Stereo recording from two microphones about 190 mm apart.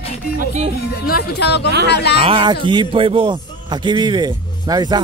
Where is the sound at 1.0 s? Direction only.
55° left (ahead or behind).